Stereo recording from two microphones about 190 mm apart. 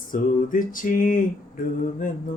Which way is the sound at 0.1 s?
45° left (ahead or behind).